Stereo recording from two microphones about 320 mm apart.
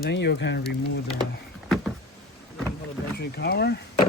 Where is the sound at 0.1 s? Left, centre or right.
Left.